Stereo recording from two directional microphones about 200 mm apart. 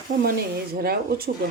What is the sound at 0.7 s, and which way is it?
Speech, 50° right (ahead or behind).